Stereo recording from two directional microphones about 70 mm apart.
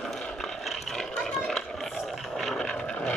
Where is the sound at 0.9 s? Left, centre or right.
Centre.